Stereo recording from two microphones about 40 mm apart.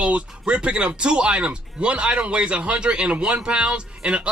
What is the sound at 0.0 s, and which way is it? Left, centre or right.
Speech, right.